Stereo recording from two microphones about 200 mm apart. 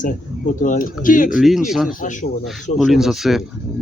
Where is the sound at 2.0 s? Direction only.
40° left (ahead or behind).